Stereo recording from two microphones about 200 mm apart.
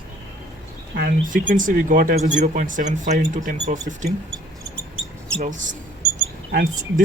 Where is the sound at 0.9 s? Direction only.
50° right (ahead or behind).